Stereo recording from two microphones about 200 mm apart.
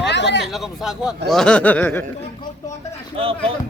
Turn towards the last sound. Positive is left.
turn(degrees=-30)  # may be behind; listen again after turning